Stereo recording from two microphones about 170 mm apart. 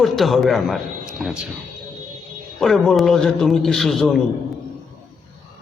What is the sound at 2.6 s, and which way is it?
A man's voice, centre (ahead or behind).